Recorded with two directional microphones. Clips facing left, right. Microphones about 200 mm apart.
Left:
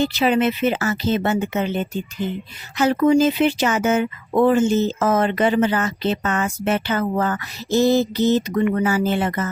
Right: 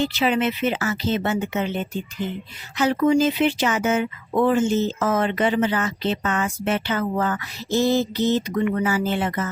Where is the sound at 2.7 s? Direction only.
45° left (ahead or behind).